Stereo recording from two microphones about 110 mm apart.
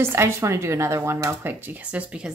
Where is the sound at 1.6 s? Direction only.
15° right (ahead or behind).